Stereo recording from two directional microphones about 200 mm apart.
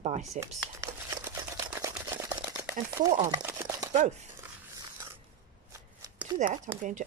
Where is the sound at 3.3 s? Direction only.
15° right (ahead or behind).